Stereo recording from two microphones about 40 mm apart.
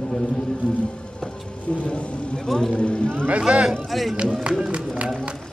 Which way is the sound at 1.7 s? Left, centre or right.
Left.